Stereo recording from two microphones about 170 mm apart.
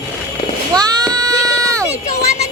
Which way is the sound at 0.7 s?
20° right (ahead or behind).